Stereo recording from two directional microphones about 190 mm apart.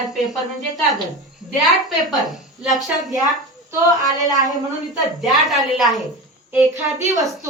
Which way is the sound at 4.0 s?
20° right (ahead or behind).